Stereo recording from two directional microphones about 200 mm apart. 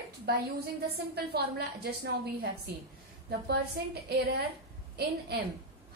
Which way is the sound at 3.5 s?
55° right (ahead or behind).